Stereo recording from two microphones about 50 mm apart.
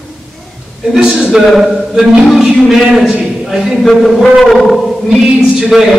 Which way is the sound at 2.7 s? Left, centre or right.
Centre.